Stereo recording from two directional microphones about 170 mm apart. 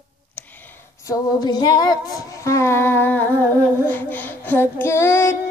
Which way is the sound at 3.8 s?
10° left (ahead or behind).